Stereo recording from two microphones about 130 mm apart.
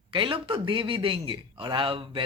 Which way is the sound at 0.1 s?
40° right (ahead or behind).